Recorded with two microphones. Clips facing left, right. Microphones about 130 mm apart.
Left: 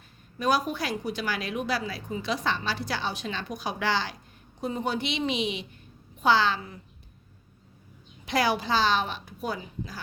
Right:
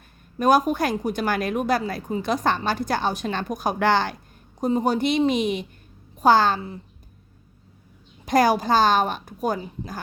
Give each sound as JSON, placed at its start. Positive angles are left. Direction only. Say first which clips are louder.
{"t": 0.3, "sound": "a woman's voice", "louder": "right 7 dB", "side_deg": -50}
{"t": 4.6, "sound": "a woman's voice", "louder": "right 8 dB", "side_deg": -40}
{"t": 8.2, "sound": "a woman's voice", "louder": "right 7 dB", "side_deg": -45}